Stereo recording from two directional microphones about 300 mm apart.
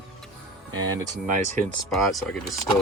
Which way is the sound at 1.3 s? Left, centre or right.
Right.